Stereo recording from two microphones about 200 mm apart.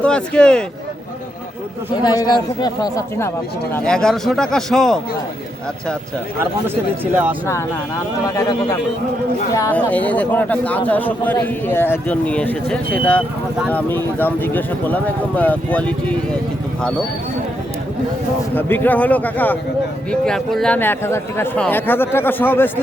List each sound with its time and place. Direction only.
0.0 s speech: 5° left (ahead or behind)
2.2 s speech: 20° left (ahead or behind)
3.8 s a man's voice: 5° left (ahead or behind)
7.0 s speech: 10° right (ahead or behind)
9.6 s a man's voice: 10° left (ahead or behind)
18.5 s a man's voice: 10° left (ahead or behind)